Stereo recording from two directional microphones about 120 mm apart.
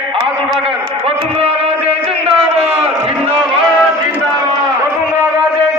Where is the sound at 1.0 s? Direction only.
55° right (ahead or behind).